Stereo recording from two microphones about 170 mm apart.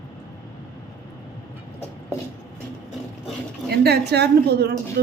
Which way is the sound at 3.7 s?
70° right (ahead or behind).